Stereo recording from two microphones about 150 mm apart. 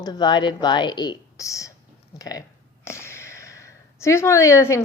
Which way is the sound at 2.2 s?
25° left (ahead or behind).